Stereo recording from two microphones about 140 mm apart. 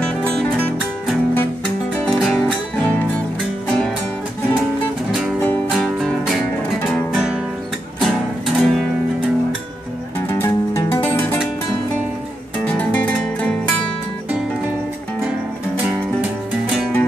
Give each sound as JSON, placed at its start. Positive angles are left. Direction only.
{"t": 2.0, "sound": "music", "side_deg": 0}
{"t": 5.7, "sound": "music", "side_deg": 0}
{"t": 10.3, "sound": "music", "side_deg": 20}
{"t": 12.6, "sound": "music", "side_deg": 10}
{"t": 15.8, "sound": "music", "side_deg": -5}